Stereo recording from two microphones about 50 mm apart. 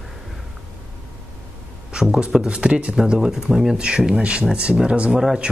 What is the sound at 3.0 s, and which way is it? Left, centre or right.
A man's voice, centre.